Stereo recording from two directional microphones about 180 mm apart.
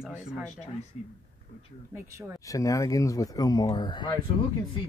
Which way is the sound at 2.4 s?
20° left (ahead or behind).